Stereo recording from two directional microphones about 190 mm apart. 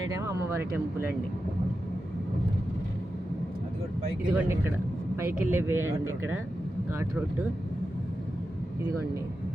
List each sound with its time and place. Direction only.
0.5 s speech: 10° right (ahead or behind)
4.4 s speech: 10° right (ahead or behind)